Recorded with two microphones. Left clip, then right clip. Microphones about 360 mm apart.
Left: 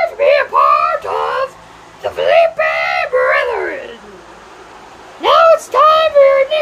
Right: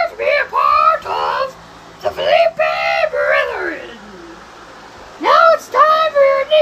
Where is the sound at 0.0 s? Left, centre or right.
Centre.